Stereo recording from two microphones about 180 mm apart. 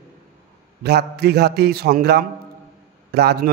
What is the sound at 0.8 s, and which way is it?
A man's voice, 65° right (ahead or behind).